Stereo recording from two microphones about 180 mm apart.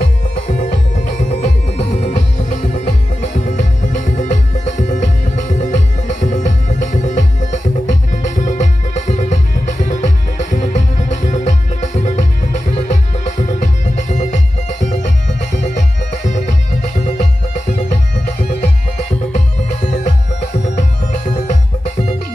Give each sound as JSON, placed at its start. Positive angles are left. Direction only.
{"t": 0.0, "sound": "music", "side_deg": 45}
{"t": 19.3, "sound": "music", "side_deg": 40}